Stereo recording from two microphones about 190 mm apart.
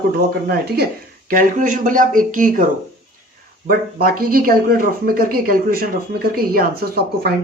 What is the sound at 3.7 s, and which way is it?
Speech, 50° right (ahead or behind).